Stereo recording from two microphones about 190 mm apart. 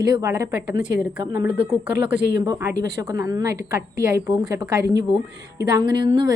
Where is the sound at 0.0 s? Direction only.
20° right (ahead or behind).